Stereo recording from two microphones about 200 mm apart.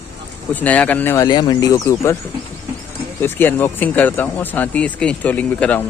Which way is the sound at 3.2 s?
10° left (ahead or behind).